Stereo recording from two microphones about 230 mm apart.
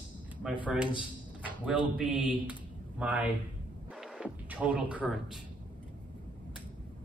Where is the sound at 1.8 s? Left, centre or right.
Left.